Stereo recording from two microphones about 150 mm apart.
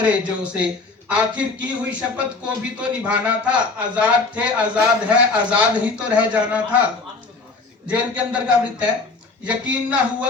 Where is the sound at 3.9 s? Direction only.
10° right (ahead or behind).